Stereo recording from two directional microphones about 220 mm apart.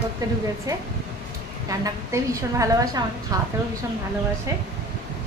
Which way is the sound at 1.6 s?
15° right (ahead or behind).